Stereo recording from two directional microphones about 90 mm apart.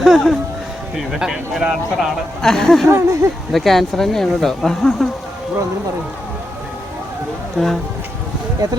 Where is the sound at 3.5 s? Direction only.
Centre (ahead or behind).